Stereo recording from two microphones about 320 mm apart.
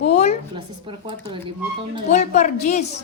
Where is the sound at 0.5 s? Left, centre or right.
Centre.